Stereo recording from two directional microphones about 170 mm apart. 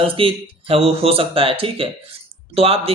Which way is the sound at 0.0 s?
30° right (ahead or behind).